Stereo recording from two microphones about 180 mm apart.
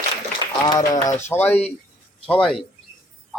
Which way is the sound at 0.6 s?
20° left (ahead or behind).